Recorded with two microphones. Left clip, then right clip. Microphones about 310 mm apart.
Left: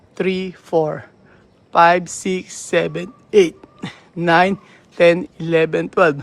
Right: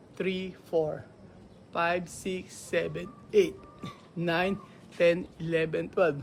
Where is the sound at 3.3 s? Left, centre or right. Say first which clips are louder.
Left 11 dB; left.